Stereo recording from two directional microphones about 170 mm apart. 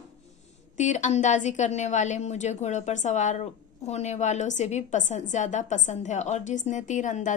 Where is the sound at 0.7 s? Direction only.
45° left (ahead or behind).